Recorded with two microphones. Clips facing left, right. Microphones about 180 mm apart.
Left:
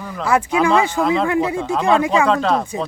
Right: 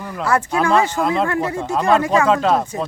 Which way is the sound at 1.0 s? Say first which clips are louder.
Left 1 dB; centre (ahead or behind).